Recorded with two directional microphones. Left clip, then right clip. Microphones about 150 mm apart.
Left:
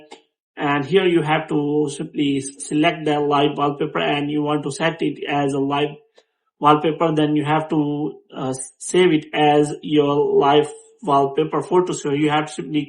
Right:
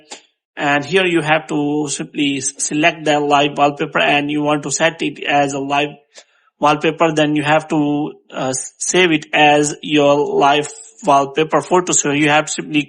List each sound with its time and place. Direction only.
0.1 s speech: 35° right (ahead or behind)
6.6 s speech: 45° right (ahead or behind)